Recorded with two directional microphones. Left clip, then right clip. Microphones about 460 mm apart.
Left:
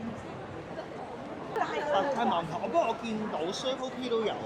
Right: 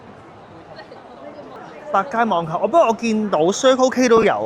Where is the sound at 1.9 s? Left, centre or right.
Right.